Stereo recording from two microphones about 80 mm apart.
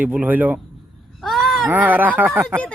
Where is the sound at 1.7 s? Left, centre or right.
Right.